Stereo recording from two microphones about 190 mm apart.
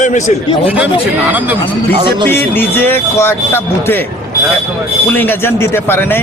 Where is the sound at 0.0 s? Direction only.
40° left (ahead or behind).